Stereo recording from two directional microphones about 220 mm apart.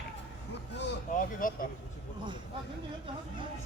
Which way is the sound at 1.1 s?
40° left (ahead or behind).